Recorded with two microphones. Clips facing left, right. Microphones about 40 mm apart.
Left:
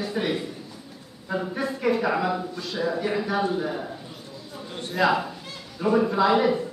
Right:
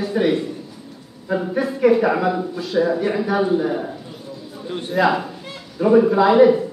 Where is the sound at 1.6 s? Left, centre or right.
Centre.